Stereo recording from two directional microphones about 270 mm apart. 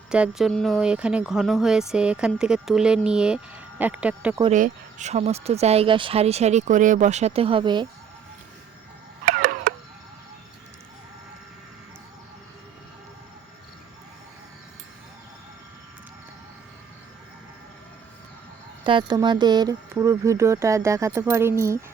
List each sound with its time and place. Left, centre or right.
0.1 s speech: centre
4.4 s speech: right
9.3 s a sound: right
18.9 s speech: centre